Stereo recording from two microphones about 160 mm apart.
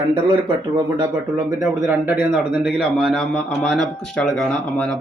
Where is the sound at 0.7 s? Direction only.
25° right (ahead or behind).